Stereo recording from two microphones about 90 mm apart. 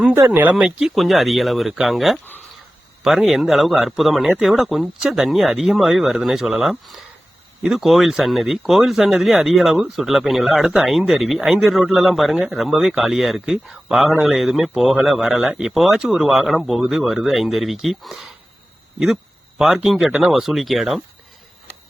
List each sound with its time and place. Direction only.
0.1 s speech: 25° right (ahead or behind)
0.8 s a man's voice: centre (ahead or behind)